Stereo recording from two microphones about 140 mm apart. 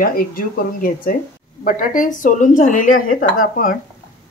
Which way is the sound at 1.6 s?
70° left (ahead or behind).